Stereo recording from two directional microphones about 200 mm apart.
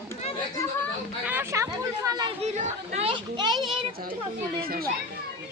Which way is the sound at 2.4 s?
35° right (ahead or behind).